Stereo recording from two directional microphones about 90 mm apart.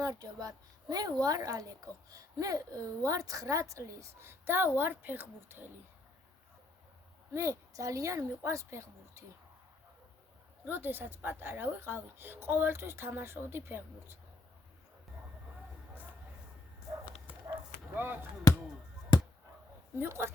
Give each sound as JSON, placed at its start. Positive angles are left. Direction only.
{"t": 0.0, "sound": "a woman's voice", "side_deg": -45}
{"t": 7.3, "sound": "a woman's voice", "side_deg": -35}
{"t": 10.7, "sound": "a woman's voice", "side_deg": -25}
{"t": 17.5, "sound": "bow-wow", "side_deg": -25}
{"t": 20.0, "sound": "a woman's voice", "side_deg": -25}